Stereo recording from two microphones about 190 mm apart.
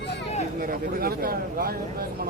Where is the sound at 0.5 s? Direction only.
50° right (ahead or behind).